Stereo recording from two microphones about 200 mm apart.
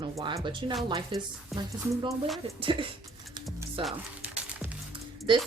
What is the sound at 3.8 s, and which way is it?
Music, 5° right (ahead or behind).